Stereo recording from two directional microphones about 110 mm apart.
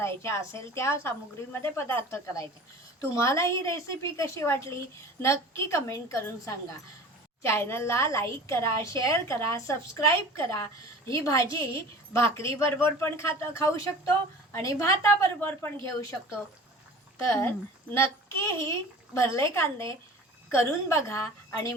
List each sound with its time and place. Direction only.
0.0 s a woman's voice: 25° left (ahead or behind)
17.2 s a woman's voice: 25° left (ahead or behind)